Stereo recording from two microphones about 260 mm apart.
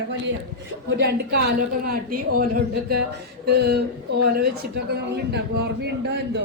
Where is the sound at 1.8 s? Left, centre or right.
Right.